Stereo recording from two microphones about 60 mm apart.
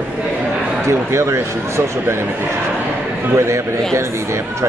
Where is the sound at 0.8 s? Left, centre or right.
Right.